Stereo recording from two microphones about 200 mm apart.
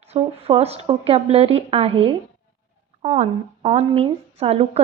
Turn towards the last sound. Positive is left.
turn(degrees=-30)  # may be behind; listen again after turning